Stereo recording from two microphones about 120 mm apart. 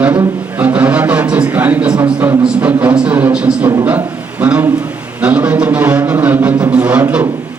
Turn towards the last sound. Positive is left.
turn(degrees=-10)  # may be behind; listen again after turning